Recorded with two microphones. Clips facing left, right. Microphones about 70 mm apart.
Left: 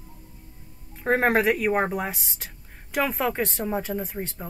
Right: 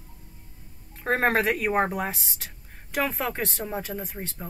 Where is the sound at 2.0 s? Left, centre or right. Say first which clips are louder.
Even; centre.